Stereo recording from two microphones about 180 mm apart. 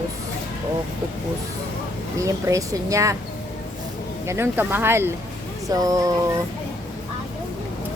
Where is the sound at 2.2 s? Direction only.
20° right (ahead or behind).